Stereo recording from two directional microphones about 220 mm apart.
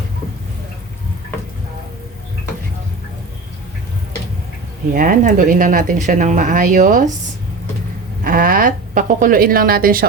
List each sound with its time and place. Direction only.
4.9 s speech: 35° right (ahead or behind)
8.2 s speech: 40° right (ahead or behind)